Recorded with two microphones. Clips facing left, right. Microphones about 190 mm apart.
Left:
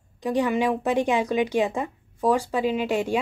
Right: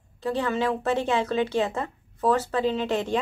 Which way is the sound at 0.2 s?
15° left (ahead or behind).